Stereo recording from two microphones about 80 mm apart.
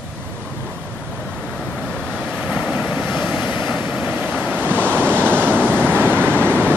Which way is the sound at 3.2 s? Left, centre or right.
Centre.